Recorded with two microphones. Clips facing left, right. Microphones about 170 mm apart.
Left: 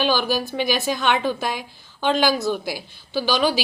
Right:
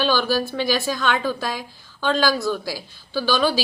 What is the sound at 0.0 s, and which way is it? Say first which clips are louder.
A woman's voice: right 1 dB; 15° left (ahead or behind).